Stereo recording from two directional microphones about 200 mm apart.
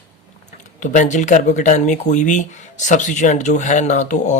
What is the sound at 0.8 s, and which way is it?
Speech, 40° left (ahead or behind).